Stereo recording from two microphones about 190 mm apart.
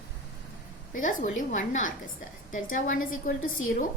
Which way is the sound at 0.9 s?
45° left (ahead or behind).